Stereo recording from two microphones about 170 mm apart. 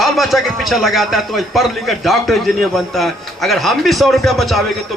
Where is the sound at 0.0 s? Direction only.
Centre (ahead or behind).